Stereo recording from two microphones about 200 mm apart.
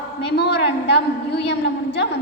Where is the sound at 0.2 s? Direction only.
55° left (ahead or behind).